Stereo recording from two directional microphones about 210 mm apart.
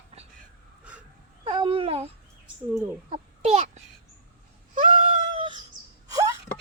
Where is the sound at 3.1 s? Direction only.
30° right (ahead or behind).